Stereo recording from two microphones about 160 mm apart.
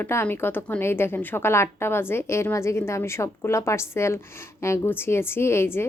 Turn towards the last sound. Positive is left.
turn(degrees=15)  # may be behind; listen again after turning